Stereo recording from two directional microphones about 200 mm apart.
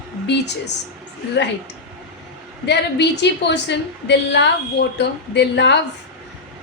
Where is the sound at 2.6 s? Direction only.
60° left (ahead or behind).